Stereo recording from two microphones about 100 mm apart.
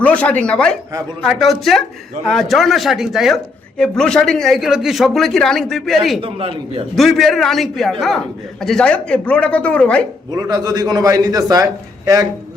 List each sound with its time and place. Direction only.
0.0 s speech: 15° left (ahead or behind)
6.2 s a man's voice: 70° right (ahead or behind)
6.9 s speech: centre (ahead or behind)
10.3 s a man's voice: 40° right (ahead or behind)